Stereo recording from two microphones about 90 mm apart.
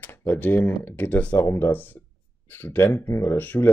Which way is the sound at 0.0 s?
25° left (ahead or behind).